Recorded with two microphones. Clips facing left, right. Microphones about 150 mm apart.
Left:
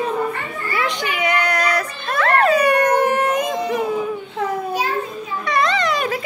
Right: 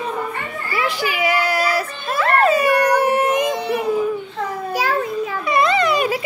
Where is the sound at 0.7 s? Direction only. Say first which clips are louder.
Right 1 dB; 5° right (ahead or behind).